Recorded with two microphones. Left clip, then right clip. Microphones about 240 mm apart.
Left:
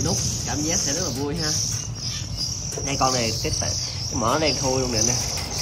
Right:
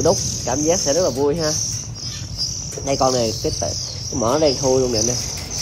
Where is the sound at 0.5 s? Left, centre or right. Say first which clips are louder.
Right 9 dB; centre.